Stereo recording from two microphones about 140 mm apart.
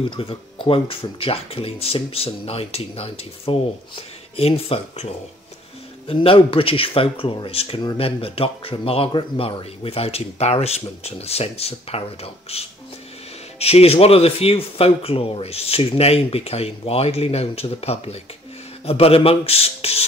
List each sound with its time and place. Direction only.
0.1 s speech: 40° left (ahead or behind)